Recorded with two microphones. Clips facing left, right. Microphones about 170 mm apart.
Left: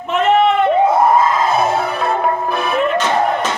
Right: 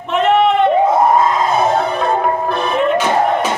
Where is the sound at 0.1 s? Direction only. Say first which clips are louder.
Even; centre (ahead or behind).